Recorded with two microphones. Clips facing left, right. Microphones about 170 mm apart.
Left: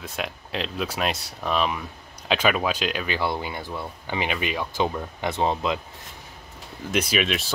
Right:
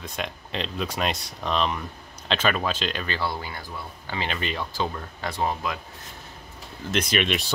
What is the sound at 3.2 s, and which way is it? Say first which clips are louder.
Speech: left 3 dB; 20° left (ahead or behind).